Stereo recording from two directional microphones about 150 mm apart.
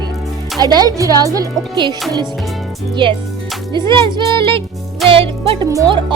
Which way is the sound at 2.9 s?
35° right (ahead or behind).